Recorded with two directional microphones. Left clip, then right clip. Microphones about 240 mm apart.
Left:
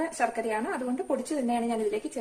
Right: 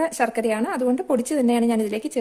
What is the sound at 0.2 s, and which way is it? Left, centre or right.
A woman's voice, right.